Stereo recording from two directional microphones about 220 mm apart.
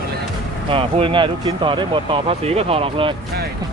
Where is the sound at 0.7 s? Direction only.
25° right (ahead or behind).